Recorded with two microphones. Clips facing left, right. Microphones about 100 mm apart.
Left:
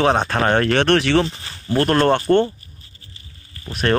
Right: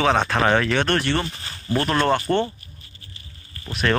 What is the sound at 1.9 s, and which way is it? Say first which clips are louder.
Speech: left 4 dB; 55° left (ahead or behind).